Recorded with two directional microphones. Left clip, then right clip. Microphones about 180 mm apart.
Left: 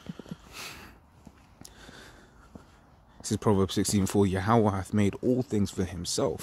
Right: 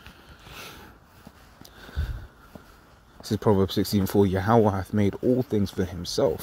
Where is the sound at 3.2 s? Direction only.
Centre (ahead or behind).